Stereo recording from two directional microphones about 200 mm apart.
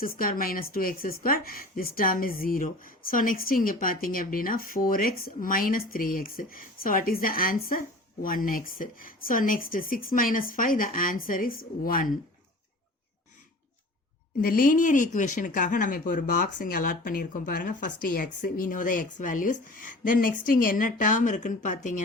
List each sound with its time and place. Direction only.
0.0 s speech: 45° left (ahead or behind)
14.4 s speech: 45° left (ahead or behind)